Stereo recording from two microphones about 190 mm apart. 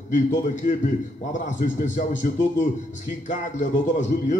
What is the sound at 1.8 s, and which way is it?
Speech, 40° left (ahead or behind).